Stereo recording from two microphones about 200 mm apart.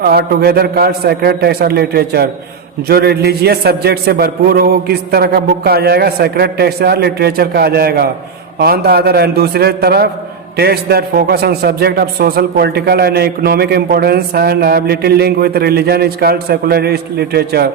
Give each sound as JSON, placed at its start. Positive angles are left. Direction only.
{"t": 0.0, "sound": "a man's voice", "side_deg": -50}